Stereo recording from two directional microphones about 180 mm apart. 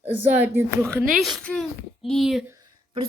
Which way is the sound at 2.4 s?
20° right (ahead or behind).